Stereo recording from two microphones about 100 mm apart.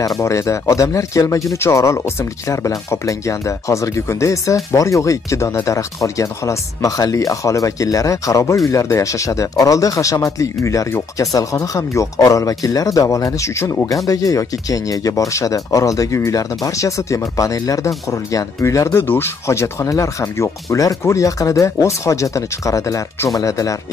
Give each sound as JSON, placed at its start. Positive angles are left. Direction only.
{"t": 0.0, "sound": "speech", "side_deg": 35}